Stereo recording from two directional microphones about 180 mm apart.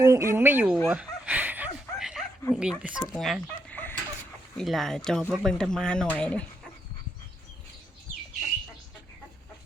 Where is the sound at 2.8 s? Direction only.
5° right (ahead or behind).